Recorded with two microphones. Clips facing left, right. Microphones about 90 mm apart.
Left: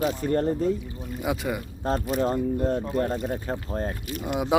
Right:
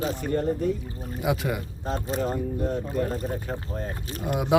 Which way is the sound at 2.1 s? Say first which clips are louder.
Left 2 dB; 30° right (ahead or behind).